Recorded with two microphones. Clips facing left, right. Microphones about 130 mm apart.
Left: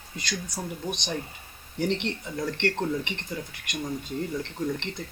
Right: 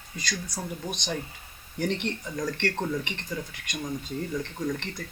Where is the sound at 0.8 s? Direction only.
20° left (ahead or behind).